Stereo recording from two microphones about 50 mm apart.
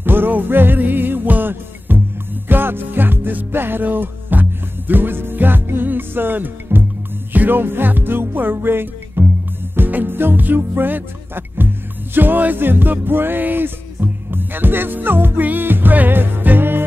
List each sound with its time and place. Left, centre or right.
0.0 s music: right